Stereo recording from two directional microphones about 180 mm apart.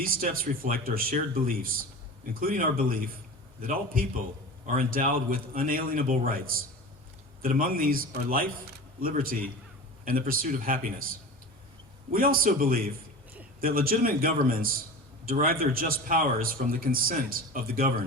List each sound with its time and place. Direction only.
0.0 s a man's voice: 55° right (ahead or behind)
12.1 s a man's voice: 55° right (ahead or behind)